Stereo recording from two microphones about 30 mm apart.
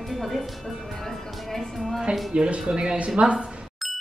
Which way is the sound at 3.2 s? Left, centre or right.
Right.